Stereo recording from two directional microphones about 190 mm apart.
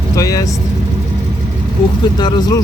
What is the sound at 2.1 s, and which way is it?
Speech, 20° left (ahead or behind).